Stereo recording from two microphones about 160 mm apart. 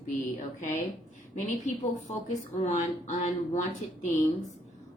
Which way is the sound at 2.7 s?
50° left (ahead or behind).